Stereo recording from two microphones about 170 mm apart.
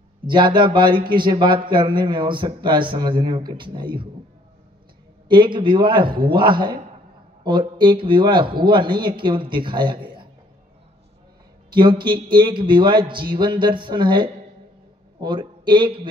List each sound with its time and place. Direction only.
0.3 s speech: 25° right (ahead or behind)
5.3 s speech: 30° right (ahead or behind)
11.7 s speech: 25° right (ahead or behind)